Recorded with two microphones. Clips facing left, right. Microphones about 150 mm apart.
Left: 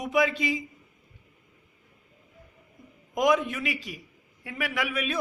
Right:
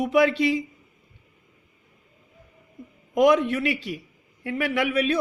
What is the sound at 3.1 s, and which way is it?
A man's voice, 65° right (ahead or behind).